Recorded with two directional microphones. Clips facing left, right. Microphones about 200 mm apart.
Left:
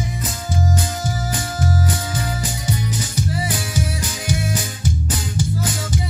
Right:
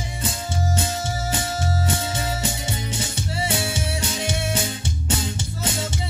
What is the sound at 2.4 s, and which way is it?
Music, 25° right (ahead or behind).